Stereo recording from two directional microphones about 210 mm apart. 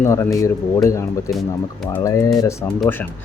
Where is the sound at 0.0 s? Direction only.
15° left (ahead or behind).